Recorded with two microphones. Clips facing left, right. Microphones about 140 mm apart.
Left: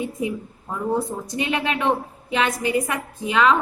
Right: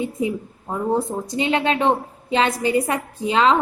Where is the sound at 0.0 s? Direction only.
30° right (ahead or behind).